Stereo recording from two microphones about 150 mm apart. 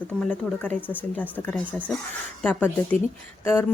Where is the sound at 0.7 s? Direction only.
10° left (ahead or behind).